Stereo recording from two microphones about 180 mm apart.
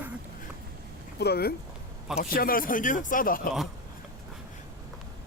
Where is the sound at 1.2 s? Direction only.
60° left (ahead or behind).